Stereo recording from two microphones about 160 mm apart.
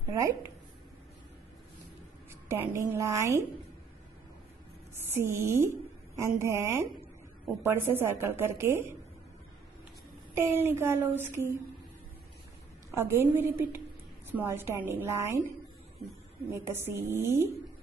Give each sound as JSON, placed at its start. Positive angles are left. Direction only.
{"t": 0.1, "sound": "a woman's voice", "side_deg": -20}
{"t": 2.4, "sound": "a woman's voice", "side_deg": -15}
{"t": 5.1, "sound": "a woman's voice", "side_deg": -15}
{"t": 10.3, "sound": "a woman's voice", "side_deg": -15}
{"t": 12.9, "sound": "a woman's voice", "side_deg": -15}
{"t": 16.4, "sound": "a woman's voice", "side_deg": -15}